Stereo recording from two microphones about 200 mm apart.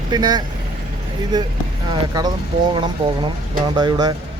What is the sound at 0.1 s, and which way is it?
Speech, 20° right (ahead or behind).